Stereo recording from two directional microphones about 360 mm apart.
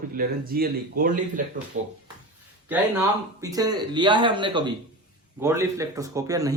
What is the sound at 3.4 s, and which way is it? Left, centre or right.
Speech, centre.